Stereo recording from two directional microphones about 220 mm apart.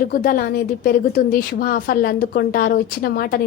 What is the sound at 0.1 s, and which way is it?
A woman's voice, 40° left (ahead or behind).